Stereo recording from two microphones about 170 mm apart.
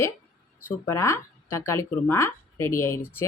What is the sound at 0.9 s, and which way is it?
Speech, 15° left (ahead or behind).